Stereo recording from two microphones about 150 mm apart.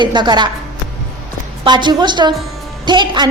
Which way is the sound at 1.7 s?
30° right (ahead or behind).